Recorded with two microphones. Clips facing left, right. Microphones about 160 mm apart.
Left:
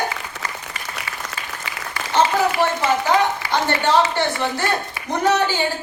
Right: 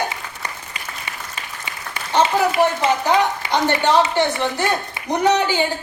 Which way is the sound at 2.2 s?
20° right (ahead or behind).